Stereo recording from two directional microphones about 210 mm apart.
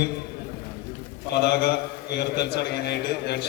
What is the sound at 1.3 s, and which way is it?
A man's voice, 50° left (ahead or behind).